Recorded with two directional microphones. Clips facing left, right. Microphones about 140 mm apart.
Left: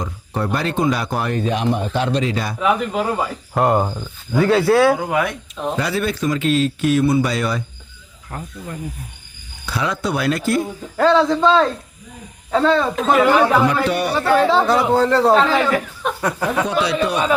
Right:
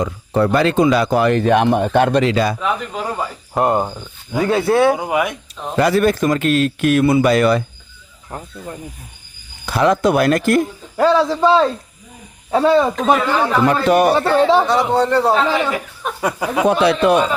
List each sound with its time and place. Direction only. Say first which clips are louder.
0.0 s speech: right 7 dB; 80° right
2.6 s a man's voice: left 3 dB; 5° left (ahead or behind)
4.3 s speech: left 1 dB; 20° right (ahead or behind)
5.7 s a man's voice: right 9 dB; 50° right (ahead or behind); by 7.6 s 65° right (ahead or behind)
8.3 s speech: right 1 dB; 20° right (ahead or behind)
9.6 s speech: right 8 dB; 50° right (ahead or behind)
10.9 s speech: even; 10° right (ahead or behind)
13.1 s speech: left 4 dB; 15° left (ahead or behind)
13.7 s speech: right 5 dB; 45° right (ahead or behind)
14.2 s speech: right 2 dB; 20° right (ahead or behind)
14.7 s a man's voice: even; centre (ahead or behind)
16.6 s a man's voice: right 6 dB; 55° right (ahead or behind)